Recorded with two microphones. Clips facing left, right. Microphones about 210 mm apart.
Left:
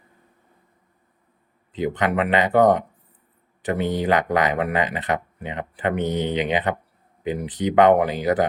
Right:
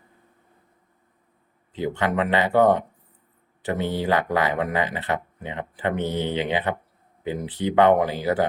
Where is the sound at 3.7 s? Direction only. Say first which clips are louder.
Left 2 dB; 15° left (ahead or behind).